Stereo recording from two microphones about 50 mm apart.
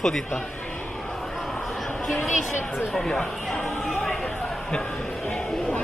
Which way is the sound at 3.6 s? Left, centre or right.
Centre.